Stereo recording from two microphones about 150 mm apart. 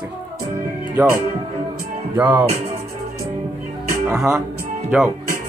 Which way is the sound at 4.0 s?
5° right (ahead or behind).